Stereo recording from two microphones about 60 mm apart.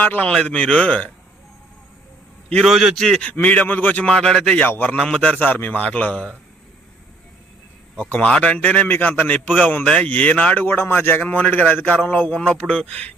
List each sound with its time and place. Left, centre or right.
0.0 s a man's voice: left
0.3 s a man's voice: centre
2.6 s a man's voice: centre
3.4 s a man's voice: left
4.0 s a man's voice: centre
4.6 s a man's voice: left
4.9 s a man's voice: centre
5.4 s a man's voice: left
8.2 s a man's voice: centre
9.8 s a man's voice: centre
10.1 s a man's voice: left
12.3 s a man's voice: centre